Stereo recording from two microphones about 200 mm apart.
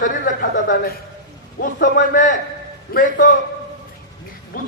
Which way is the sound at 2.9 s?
60° left (ahead or behind).